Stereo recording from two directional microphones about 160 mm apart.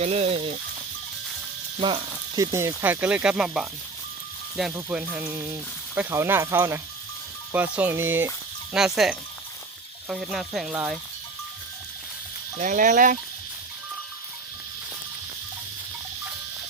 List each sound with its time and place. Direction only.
0.0 s speech: 40° right (ahead or behind)
1.8 s speech: 30° right (ahead or behind); by 3.7 s centre (ahead or behind)
4.7 s speech: 10° right (ahead or behind)
12.5 s speech: 55° right (ahead or behind)